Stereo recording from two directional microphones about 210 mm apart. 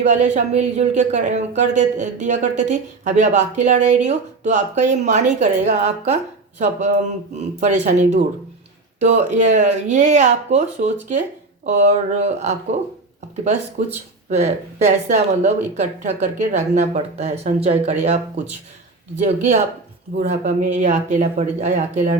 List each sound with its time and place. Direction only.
0.0 s speech: 35° right (ahead or behind)
19.2 s speech: 35° right (ahead or behind)